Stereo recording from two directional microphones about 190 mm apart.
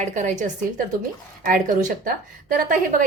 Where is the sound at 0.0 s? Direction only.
40° right (ahead or behind).